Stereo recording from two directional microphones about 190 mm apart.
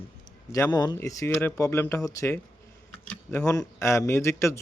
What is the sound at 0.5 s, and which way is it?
Speech, 20° left (ahead or behind).